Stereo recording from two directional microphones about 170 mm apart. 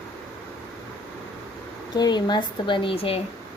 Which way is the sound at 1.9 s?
25° left (ahead or behind).